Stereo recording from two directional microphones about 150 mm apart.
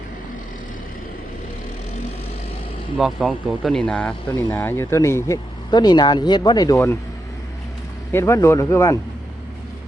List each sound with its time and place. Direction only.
3.0 s speech: centre (ahead or behind); by 6.7 s 25° left (ahead or behind)
8.1 s speech: 20° left (ahead or behind)